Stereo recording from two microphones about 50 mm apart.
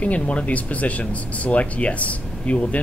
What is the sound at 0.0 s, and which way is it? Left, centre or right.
Speech, left.